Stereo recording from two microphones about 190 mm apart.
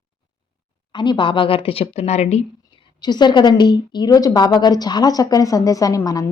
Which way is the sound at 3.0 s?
25° left (ahead or behind).